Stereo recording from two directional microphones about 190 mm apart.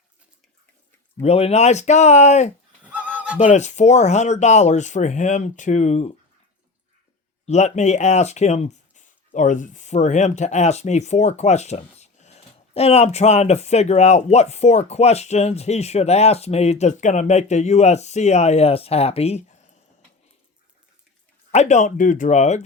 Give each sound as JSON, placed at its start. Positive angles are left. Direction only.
{"t": 1.2, "sound": "speech", "side_deg": 35}
{"t": 2.8, "sound": "honk", "side_deg": -5}
{"t": 3.3, "sound": "speech", "side_deg": 40}
{"t": 7.4, "sound": "speech", "side_deg": 35}
{"t": 21.5, "sound": "speech", "side_deg": 35}